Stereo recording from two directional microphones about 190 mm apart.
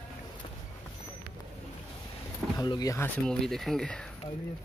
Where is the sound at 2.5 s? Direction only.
20° left (ahead or behind).